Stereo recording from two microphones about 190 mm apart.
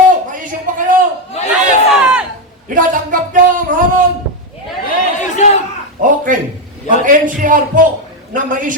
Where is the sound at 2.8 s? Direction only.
45° right (ahead or behind).